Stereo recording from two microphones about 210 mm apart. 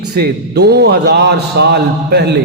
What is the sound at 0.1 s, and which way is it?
A man's voice, 50° right (ahead or behind).